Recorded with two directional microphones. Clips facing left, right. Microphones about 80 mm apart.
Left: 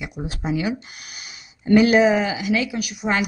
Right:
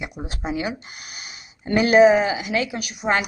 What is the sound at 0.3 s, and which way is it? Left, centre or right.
Speech, right.